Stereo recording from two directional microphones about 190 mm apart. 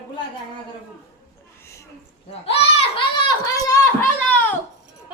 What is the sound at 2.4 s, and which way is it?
A child's voice, 30° left (ahead or behind).